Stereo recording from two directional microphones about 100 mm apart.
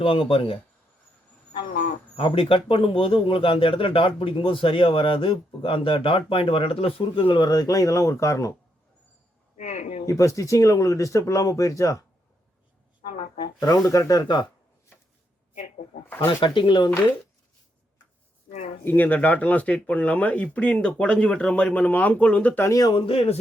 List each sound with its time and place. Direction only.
0.0 s speech: 65° left (ahead or behind)
2.1 s speech: 65° left (ahead or behind); by 8.5 s 30° left (ahead or behind)
10.1 s speech: 35° left (ahead or behind)
13.6 s speech: 35° left (ahead or behind)
16.2 s speech: 55° left (ahead or behind)
18.9 s speech: 20° left (ahead or behind)
22.6 s speech: 35° left (ahead or behind)
23.0 s speech: 70° left (ahead or behind)